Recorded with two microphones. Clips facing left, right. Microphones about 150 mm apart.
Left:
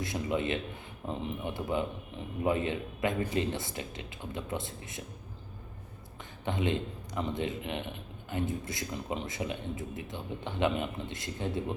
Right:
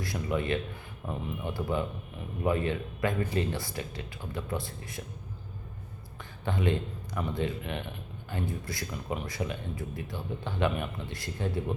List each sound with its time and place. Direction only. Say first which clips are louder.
0.0 s a man's voice: even; 20° left (ahead or behind)
6.4 s a man's voice: right 1 dB; 20° left (ahead or behind)